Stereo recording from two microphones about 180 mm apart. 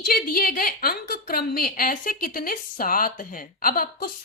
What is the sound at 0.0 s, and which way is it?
A woman's voice, 55° left (ahead or behind).